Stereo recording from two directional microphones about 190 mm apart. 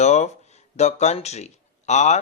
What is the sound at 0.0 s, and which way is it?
Speech, 35° left (ahead or behind).